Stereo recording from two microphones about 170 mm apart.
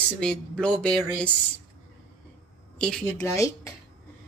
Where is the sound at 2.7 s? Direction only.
5° left (ahead or behind).